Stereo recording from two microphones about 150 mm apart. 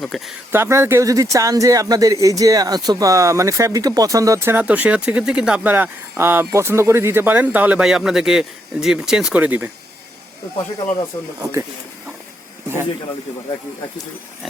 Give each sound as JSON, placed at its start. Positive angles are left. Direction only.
{"t": 0.0, "sound": "speech", "side_deg": 0}
{"t": 0.5, "sound": "speech", "side_deg": -15}
{"t": 12.6, "sound": "speech", "side_deg": -15}